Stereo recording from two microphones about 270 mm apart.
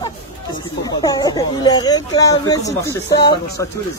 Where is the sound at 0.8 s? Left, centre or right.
Centre.